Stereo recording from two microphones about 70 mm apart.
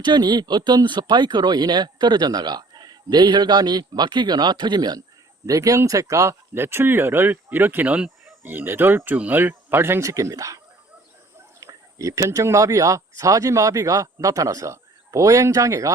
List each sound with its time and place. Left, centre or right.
0.0 s speech: right
5.5 s speech: right
7.9 s fowl: centre
8.4 s speech: right
10.0 s speech: right
11.7 s speech: right